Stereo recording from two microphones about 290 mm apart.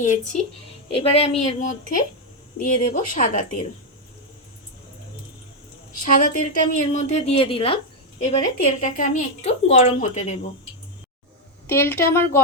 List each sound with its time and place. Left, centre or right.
0.9 s speech: centre
6.1 s speech: left
11.7 s speech: centre